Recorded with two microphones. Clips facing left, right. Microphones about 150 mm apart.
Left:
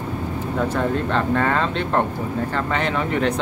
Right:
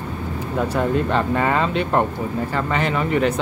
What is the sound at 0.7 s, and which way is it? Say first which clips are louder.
Speech: right 4 dB; 10° right (ahead or behind).